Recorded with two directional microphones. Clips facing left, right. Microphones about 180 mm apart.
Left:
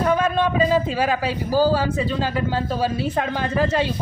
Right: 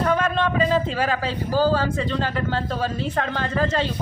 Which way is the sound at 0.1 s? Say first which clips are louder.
Left 2 dB; 10° left (ahead or behind).